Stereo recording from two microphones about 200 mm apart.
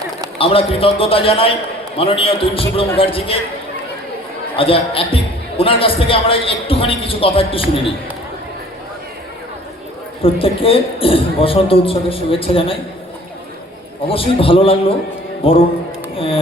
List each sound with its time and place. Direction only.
0.3 s a man's voice: 30° left (ahead or behind)
4.5 s a man's voice: 25° left (ahead or behind)
10.2 s a man's voice: 30° left (ahead or behind)
14.1 s a man's voice: 25° left (ahead or behind)